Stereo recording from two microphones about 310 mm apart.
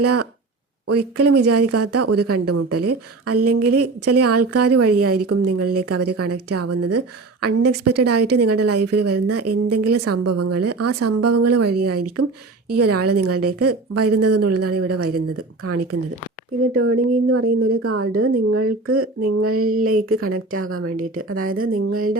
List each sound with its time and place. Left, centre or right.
0.0 s speech: right
16.7 s speech: right
21.5 s speech: right
21.8 s speech: right